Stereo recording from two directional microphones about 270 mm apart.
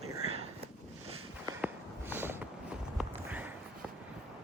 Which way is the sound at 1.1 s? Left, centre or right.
Right.